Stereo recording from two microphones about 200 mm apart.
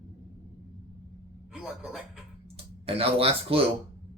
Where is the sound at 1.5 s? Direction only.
Centre (ahead or behind).